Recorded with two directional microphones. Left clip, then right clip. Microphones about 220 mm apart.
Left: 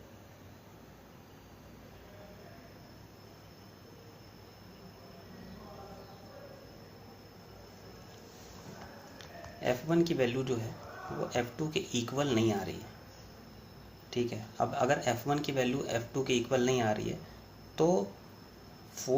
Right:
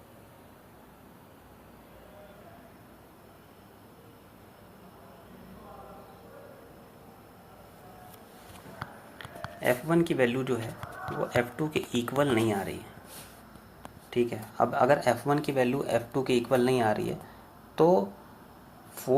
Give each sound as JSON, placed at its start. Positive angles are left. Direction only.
{"t": 9.1, "sound": "speech", "side_deg": -30}
{"t": 14.1, "sound": "speech", "side_deg": -30}